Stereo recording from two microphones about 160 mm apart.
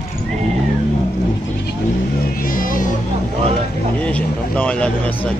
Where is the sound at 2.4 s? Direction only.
60° left (ahead or behind).